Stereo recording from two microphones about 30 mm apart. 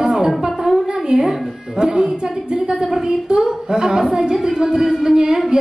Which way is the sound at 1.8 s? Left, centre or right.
Right.